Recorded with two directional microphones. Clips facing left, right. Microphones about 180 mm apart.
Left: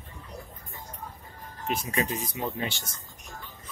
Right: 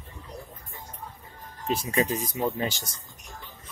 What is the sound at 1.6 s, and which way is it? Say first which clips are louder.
Speech: right 3 dB; 35° right (ahead or behind).